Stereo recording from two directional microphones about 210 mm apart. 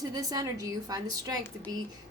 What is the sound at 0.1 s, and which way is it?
A woman's voice, 15° right (ahead or behind).